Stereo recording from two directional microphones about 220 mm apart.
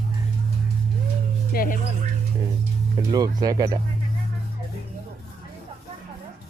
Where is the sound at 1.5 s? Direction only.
40° left (ahead or behind).